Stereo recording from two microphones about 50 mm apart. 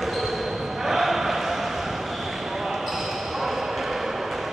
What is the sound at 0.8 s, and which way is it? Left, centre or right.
Basketball bounce, centre.